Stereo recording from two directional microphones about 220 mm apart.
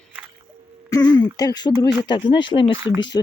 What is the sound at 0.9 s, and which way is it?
Speech, 15° left (ahead or behind).